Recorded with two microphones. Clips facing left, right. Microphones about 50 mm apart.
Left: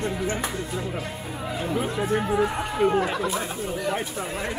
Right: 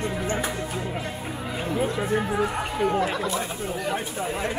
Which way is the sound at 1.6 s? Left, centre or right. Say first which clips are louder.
Right 1 dB; centre.